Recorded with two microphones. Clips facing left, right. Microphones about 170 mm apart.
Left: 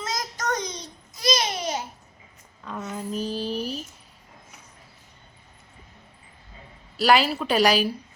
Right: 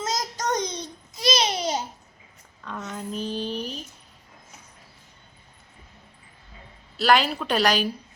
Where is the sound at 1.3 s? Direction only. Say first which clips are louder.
Right 1 dB; 20° right (ahead or behind).